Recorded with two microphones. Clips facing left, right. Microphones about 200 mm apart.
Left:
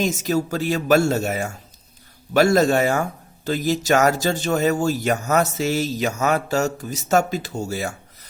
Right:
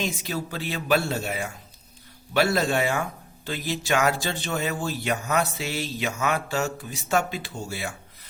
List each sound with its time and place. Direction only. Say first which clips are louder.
0.0 s speech: left 8 dB; 45° left (ahead or behind)